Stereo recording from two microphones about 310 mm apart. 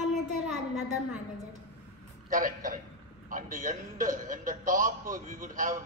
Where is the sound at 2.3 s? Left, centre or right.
Right.